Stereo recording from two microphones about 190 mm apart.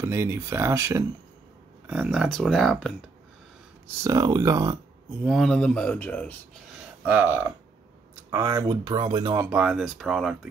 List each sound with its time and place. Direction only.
0.0 s speech: 15° right (ahead or behind)
1.9 s speech: 5° right (ahead or behind)
4.0 s speech: 20° right (ahead or behind)
5.2 s speech: centre (ahead or behind)
7.1 s speech: 10° right (ahead or behind)
9.5 s speech: 5° right (ahead or behind)